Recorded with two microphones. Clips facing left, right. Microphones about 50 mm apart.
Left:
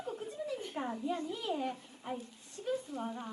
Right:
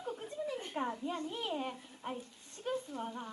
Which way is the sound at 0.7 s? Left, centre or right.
Centre.